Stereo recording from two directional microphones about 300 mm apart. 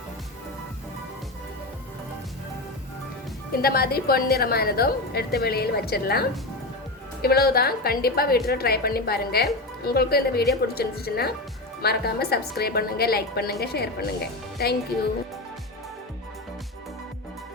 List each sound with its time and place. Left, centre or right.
3.6 s a woman's voice: left